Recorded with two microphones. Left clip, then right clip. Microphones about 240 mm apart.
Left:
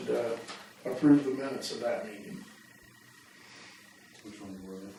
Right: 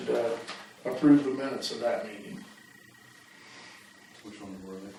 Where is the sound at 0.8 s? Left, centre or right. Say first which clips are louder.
Right 2 dB; centre.